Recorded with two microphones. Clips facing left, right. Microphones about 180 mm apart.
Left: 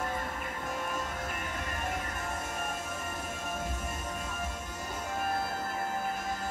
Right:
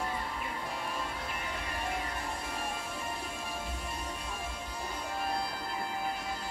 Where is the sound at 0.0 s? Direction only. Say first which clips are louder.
Left 1 dB; 45° left (ahead or behind).